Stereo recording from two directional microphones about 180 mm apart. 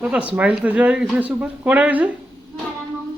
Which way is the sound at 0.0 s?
10° right (ahead or behind).